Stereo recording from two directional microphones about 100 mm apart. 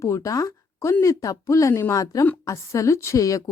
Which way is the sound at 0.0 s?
30° left (ahead or behind).